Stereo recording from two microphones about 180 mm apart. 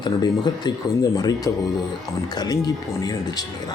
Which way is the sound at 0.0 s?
25° left (ahead or behind).